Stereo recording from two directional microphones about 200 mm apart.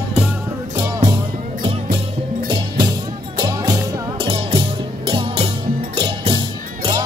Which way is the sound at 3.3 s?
20° right (ahead or behind).